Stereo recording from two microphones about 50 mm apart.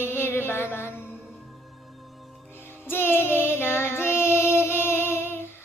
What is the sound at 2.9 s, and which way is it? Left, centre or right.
Child singing, left.